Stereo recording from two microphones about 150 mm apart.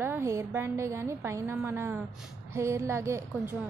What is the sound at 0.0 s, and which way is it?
A woman's voice, 15° right (ahead or behind).